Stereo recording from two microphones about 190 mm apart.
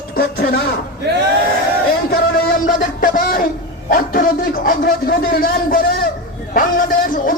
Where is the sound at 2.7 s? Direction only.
45° left (ahead or behind).